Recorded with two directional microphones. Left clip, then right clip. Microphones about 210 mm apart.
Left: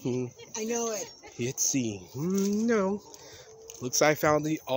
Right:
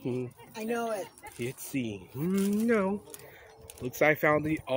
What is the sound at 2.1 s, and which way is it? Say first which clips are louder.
Speech: left 1 dB; 5° left (ahead or behind).